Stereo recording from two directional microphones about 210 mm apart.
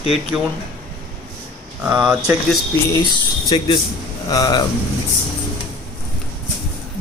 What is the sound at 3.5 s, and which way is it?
Speech, 20° left (ahead or behind).